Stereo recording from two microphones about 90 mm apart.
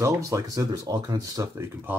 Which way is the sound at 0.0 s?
40° right (ahead or behind).